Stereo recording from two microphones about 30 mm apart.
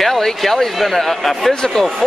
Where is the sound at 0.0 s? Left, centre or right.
Centre.